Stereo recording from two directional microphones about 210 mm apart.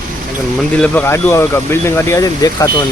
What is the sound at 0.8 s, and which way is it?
Speech, 10° left (ahead or behind).